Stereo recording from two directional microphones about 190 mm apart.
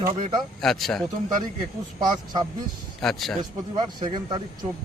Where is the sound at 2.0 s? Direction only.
20° right (ahead or behind).